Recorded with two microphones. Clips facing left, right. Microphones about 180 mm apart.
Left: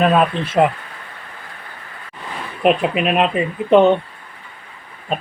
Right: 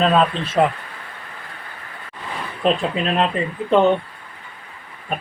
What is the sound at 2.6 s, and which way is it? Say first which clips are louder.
Speech: left 4 dB; 15° left (ahead or behind).